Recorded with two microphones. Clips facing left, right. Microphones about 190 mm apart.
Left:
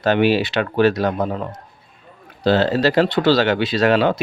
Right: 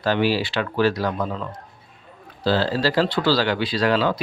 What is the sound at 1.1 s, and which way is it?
Speech, 50° left (ahead or behind).